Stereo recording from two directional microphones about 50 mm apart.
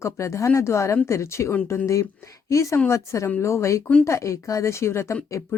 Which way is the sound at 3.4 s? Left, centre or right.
Left.